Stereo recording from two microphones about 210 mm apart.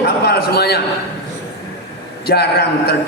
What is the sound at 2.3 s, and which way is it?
Speech, 50° left (ahead or behind).